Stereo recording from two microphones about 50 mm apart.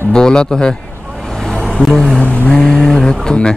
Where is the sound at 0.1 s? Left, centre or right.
Centre.